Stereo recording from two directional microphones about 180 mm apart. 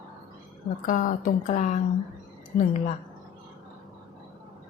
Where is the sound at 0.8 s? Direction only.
50° left (ahead or behind).